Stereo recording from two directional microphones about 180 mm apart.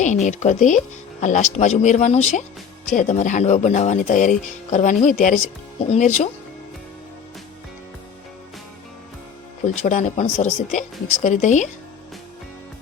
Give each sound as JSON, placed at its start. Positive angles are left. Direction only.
{"t": 0.3, "sound": "speech", "side_deg": 40}
{"t": 9.6, "sound": "speech", "side_deg": 45}